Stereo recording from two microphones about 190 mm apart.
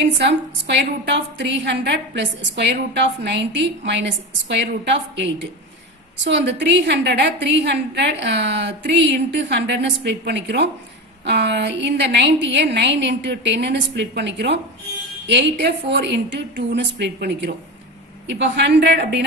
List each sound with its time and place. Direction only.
0.0 s a woman's voice: 70° right (ahead or behind)
6.2 s a woman's voice: 65° right (ahead or behind)